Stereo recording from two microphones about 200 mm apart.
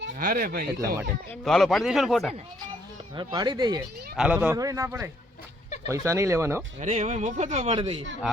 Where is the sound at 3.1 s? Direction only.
25° right (ahead or behind).